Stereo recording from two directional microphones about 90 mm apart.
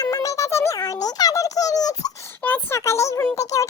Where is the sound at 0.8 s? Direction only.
45° left (ahead or behind).